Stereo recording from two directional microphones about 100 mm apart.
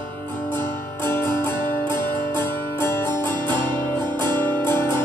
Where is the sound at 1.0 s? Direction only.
25° left (ahead or behind).